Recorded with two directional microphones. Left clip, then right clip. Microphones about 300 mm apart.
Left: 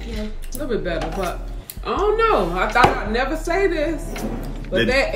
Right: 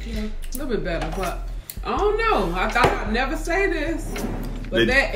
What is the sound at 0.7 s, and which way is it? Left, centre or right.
Speech, centre.